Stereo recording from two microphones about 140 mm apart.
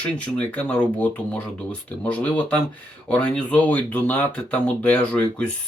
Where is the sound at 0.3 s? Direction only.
10° left (ahead or behind).